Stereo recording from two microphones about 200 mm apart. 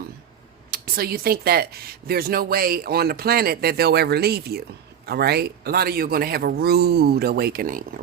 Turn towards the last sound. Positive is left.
turn(degrees=-45)  # may be behind; listen again after turning